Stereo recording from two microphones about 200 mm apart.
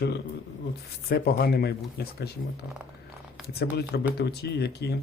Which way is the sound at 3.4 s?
55° left (ahead or behind).